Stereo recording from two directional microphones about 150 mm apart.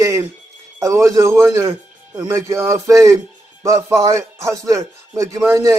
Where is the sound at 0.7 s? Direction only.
20° right (ahead or behind).